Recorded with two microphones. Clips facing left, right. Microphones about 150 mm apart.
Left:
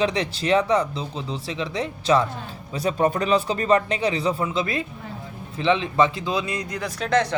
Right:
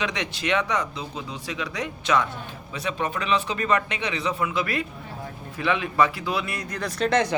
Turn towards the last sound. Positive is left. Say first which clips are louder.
# even
turn(degrees=-5)  # may be behind; listen again after turning